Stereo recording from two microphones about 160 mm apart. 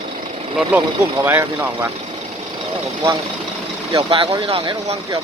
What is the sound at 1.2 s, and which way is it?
Speech, 15° right (ahead or behind).